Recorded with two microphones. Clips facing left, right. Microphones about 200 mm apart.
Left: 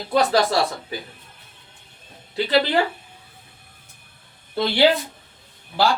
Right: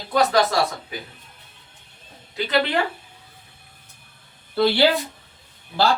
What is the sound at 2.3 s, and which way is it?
Speech, 30° left (ahead or behind).